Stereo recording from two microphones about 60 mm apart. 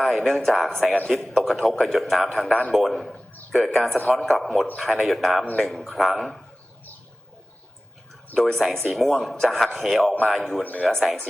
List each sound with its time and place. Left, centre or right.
0.0 s a man's voice: centre
8.4 s a man's voice: centre
10.6 s speech: left
10.8 s a man's voice: centre